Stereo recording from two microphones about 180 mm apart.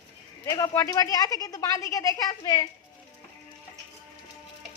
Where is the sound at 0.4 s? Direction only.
15° left (ahead or behind).